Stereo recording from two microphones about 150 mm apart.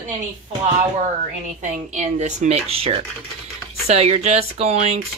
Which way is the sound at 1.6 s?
55° right (ahead or behind).